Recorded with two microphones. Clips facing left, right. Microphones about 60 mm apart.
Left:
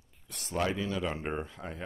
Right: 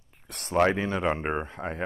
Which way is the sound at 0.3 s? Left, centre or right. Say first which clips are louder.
Right 9 dB; right.